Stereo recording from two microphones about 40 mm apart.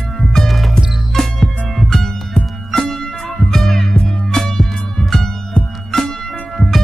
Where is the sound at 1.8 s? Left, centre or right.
Centre.